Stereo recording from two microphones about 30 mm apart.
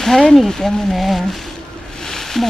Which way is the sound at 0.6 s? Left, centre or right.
Left.